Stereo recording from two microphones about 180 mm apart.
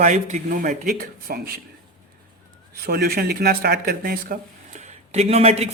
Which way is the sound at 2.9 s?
60° right (ahead or behind).